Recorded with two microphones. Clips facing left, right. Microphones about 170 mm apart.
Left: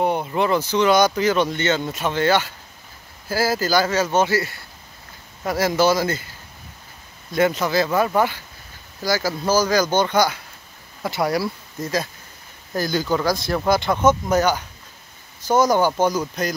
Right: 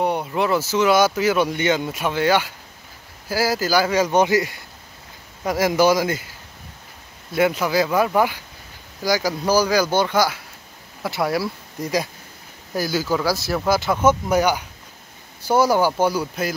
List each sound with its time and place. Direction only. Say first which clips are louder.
0.0 s speech: left 1 dB; centre (ahead or behind)
7.3 s speech: even; 10° right (ahead or behind)
11.8 s speech: right 1 dB; 15° right (ahead or behind)